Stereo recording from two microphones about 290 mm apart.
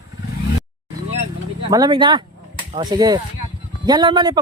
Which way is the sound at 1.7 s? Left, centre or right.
Centre.